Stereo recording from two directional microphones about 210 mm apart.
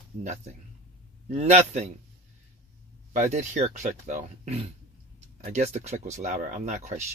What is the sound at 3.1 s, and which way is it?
Speech, 35° right (ahead or behind).